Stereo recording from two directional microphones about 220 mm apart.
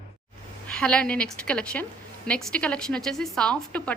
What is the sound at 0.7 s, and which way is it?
A woman's voice, 5° left (ahead or behind).